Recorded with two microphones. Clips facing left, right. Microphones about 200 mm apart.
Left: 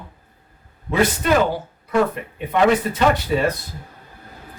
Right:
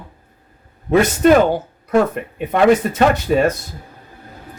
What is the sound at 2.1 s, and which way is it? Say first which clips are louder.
Speech: right 3 dB; 45° right (ahead or behind).